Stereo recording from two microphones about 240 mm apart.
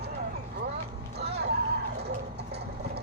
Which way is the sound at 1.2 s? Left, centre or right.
Right.